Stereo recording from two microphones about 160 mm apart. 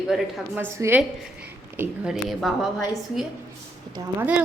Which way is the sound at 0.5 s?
15° right (ahead or behind).